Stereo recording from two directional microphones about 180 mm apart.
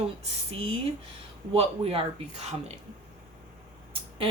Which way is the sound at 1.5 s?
35° right (ahead or behind).